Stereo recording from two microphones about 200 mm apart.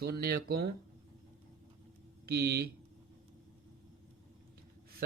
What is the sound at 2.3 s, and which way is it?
Speech, 50° right (ahead or behind).